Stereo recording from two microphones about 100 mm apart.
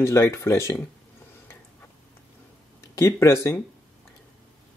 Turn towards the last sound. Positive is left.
turn(degrees=30)  # may be behind; listen again after turning